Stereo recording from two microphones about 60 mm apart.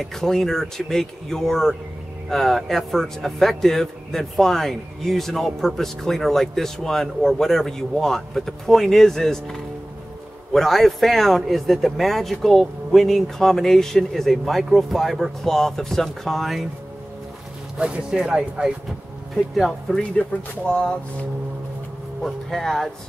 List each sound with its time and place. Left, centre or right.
0.0 s a man's voice: centre
17.7 s speech: centre
19.5 s a man's voice: centre
20.0 s speech: centre
22.2 s a man's voice: centre